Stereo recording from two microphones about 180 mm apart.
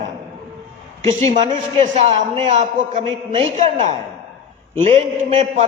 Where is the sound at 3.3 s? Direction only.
30° right (ahead or behind).